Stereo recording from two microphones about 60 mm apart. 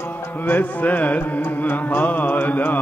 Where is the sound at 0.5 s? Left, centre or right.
Left.